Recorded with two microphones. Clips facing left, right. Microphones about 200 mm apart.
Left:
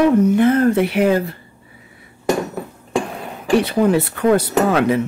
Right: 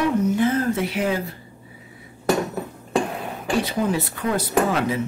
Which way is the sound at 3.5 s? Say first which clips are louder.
Left 8 dB; 65° left (ahead or behind).